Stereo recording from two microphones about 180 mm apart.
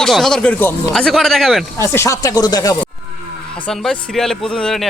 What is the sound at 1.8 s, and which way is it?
Speech, 15° left (ahead or behind).